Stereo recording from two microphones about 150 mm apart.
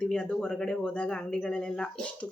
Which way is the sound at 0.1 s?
5° left (ahead or behind).